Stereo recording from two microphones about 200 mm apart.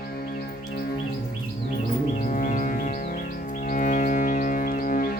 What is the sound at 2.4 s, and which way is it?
Music, 40° left (ahead or behind).